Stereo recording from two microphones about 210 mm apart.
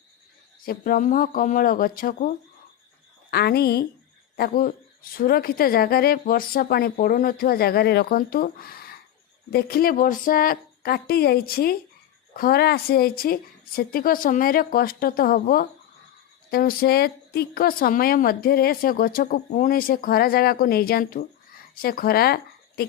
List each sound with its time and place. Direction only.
0.6 s a woman's voice: 45° left (ahead or behind)